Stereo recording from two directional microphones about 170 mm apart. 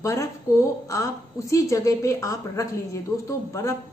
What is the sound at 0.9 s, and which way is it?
A woman's voice, 20° left (ahead or behind).